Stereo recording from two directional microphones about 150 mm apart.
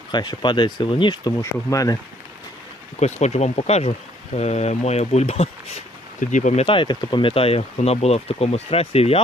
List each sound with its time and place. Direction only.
0.1 s speech: 30° left (ahead or behind)
3.0 s speech: 50° left (ahead or behind)
6.1 s speech: 55° left (ahead or behind)